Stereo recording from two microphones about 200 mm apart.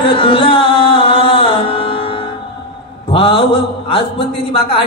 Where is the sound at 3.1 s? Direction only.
25° left (ahead or behind).